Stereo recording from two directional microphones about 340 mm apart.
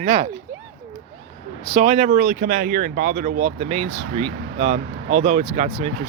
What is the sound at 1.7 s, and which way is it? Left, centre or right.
Speech, centre.